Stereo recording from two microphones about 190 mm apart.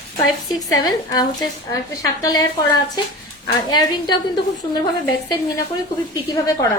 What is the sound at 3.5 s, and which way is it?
A woman's voice, 20° left (ahead or behind).